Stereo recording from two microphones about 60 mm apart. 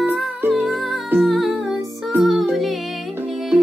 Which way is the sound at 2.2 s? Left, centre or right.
Centre.